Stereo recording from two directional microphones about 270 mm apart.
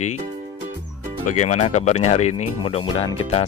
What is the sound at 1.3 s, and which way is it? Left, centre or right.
Speech, left.